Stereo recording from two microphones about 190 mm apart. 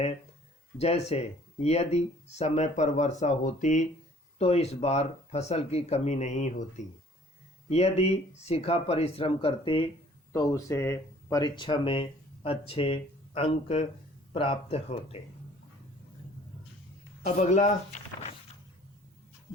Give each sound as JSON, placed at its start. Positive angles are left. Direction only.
{"t": 0.8, "sound": "speech", "side_deg": 35}
{"t": 17.2, "sound": "speech", "side_deg": 40}